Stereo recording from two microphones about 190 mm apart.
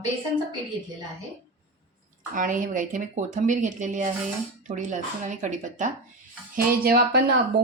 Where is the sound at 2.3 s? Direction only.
45° right (ahead or behind).